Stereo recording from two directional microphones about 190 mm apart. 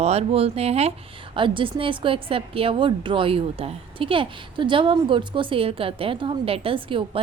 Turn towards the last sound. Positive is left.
turn(degrees=-30)  # may be behind; listen again after turning